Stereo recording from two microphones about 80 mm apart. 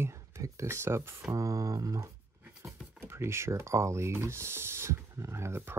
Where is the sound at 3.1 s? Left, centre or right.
Right.